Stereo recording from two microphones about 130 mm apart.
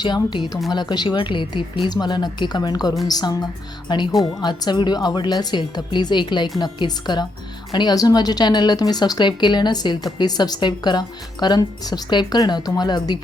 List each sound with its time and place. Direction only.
0.0 s speech: 35° left (ahead or behind)